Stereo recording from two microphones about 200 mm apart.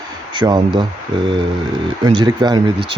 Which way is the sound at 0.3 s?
20° right (ahead or behind).